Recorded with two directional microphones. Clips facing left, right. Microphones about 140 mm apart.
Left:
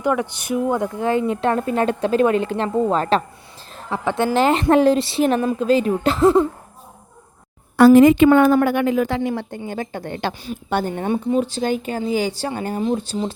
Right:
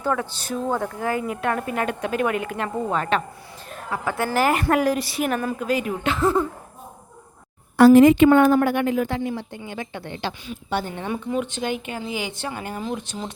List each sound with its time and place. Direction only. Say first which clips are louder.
0.0 s speech: left 4 dB; 15° left (ahead or behind); by 6.4 s 35° left (ahead or behind)
8.5 s speech: left 3 dB; 90° left; by 9.6 s 60° left (ahead or behind)
9.6 s speech: left 5 dB; 40° left (ahead or behind)